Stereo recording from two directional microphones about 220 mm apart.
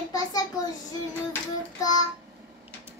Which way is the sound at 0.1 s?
15° left (ahead or behind).